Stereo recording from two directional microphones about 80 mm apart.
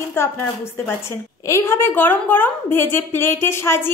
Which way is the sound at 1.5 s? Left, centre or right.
Left.